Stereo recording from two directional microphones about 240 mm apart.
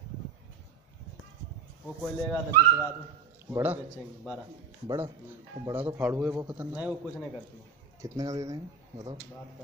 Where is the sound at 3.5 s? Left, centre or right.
Centre.